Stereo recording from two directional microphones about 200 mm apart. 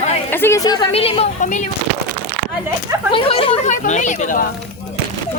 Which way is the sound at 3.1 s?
25° left (ahead or behind).